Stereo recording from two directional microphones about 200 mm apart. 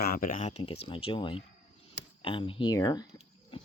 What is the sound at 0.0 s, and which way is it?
Speech, 45° left (ahead or behind).